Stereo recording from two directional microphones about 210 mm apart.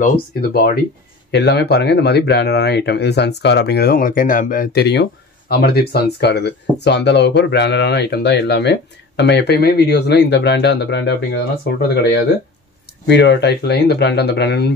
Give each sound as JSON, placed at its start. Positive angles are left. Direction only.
{"t": 0.0, "sound": "speech", "side_deg": 45}